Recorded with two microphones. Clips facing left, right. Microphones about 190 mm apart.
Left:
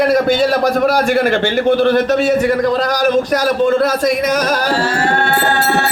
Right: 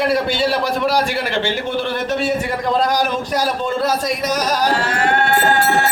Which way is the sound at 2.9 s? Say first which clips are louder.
Left 5 dB; 50° left (ahead or behind).